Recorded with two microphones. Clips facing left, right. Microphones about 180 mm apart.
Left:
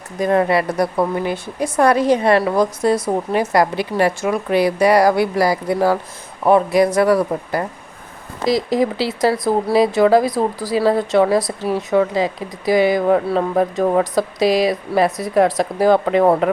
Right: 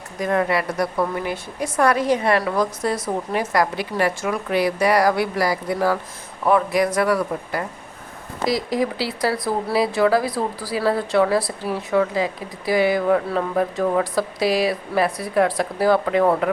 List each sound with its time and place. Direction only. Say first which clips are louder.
0.2 s speech: left 5 dB; 30° left (ahead or behind)
8.4 s speech: left 5 dB; 25° left (ahead or behind)
16.0 s speech: left 4 dB; 35° left (ahead or behind)